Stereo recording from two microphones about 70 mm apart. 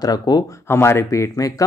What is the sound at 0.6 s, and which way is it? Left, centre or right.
Speech, left.